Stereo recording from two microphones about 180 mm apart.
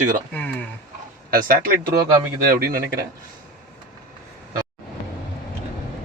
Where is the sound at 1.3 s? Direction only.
55° right (ahead or behind).